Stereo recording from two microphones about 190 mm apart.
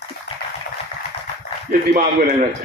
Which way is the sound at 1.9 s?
45° right (ahead or behind).